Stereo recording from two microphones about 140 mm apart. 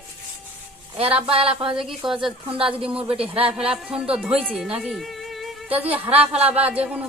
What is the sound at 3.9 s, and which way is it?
A woman's voice, 5° right (ahead or behind).